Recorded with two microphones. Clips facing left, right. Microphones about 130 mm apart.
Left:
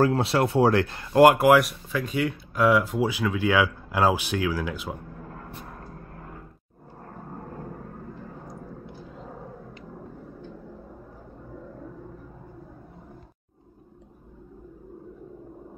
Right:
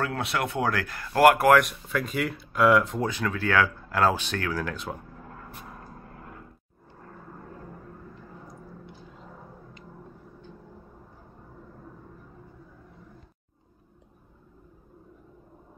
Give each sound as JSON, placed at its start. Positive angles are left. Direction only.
{"t": 0.0, "sound": "speech", "side_deg": 30}
{"t": 1.6, "sound": "speech", "side_deg": 0}